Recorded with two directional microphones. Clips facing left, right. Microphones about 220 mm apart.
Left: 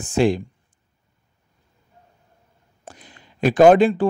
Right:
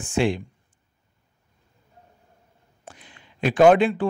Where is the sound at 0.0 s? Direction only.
40° left (ahead or behind).